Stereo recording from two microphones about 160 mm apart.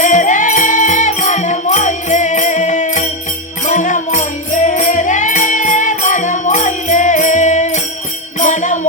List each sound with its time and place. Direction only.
0.0 s music: 50° left (ahead or behind)